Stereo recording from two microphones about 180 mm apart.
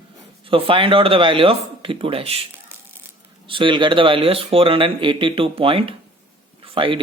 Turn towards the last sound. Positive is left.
turn(degrees=-30)  # may be behind; listen again after turning